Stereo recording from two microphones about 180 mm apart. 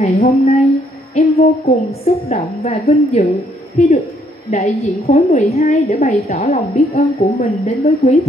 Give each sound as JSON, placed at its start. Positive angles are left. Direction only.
{"t": 0.0, "sound": "a woman's voice", "side_deg": 35}